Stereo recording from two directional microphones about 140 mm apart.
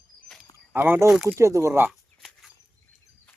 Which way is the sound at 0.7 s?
15° right (ahead or behind).